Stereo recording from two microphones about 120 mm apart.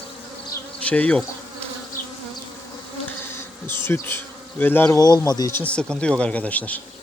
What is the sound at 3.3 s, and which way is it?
Bee, 20° left (ahead or behind).